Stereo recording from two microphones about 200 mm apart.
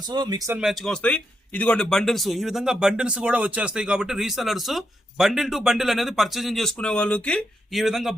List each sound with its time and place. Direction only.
0.1 s speech: 20° right (ahead or behind)
0.6 s speech: centre (ahead or behind)